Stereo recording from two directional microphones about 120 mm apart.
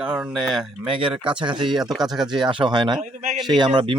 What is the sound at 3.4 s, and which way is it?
Speech, 40° right (ahead or behind).